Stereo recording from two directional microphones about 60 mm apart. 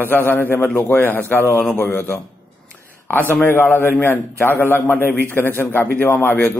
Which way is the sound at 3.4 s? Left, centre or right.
Left.